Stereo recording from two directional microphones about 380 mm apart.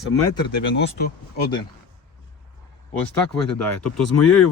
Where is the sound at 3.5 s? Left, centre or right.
Left.